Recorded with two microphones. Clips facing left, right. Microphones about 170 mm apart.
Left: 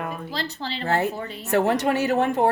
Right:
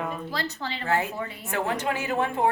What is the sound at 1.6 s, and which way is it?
Speech, 70° left (ahead or behind).